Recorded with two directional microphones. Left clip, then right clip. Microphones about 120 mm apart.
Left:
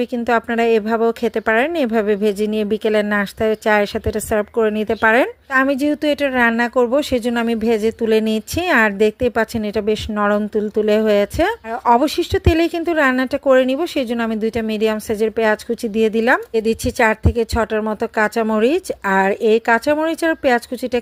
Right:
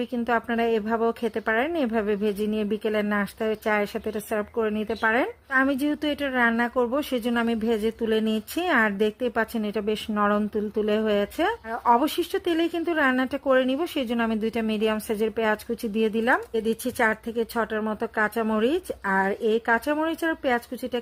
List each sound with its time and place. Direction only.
0.0 s speech: 30° left (ahead or behind)